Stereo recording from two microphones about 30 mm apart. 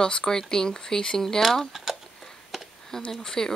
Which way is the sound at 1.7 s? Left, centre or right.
Centre.